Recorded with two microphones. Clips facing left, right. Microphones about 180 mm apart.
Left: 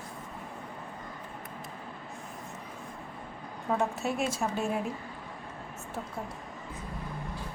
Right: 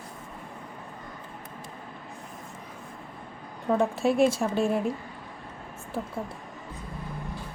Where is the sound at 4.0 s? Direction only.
30° right (ahead or behind).